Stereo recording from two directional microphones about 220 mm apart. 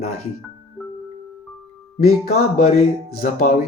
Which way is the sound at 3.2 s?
40° left (ahead or behind).